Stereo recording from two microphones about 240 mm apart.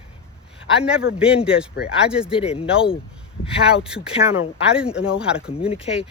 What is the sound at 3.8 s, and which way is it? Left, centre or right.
Speech, centre.